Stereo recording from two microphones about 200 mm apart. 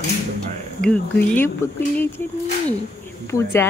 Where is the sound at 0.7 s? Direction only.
5° left (ahead or behind).